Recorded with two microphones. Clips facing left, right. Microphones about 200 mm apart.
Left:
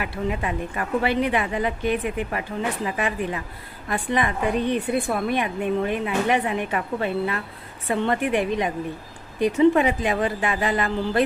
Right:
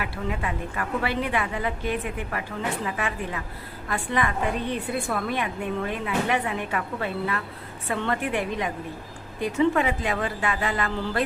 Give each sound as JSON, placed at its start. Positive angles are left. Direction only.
{"t": 0.0, "sound": "a woman's voice", "side_deg": 20}